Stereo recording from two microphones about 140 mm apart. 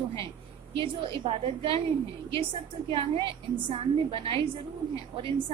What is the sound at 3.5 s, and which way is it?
Speech, 40° right (ahead or behind).